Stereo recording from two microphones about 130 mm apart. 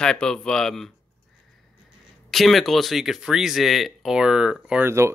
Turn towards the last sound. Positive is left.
turn(degrees=-20)  # may be behind; listen again after turning